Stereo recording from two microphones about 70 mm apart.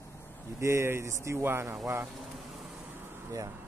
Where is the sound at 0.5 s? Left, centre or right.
Right.